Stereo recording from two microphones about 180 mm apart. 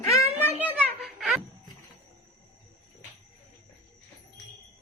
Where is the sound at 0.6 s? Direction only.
5° left (ahead or behind).